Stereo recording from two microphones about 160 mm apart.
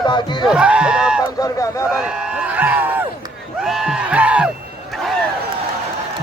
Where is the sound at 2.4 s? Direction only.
10° right (ahead or behind).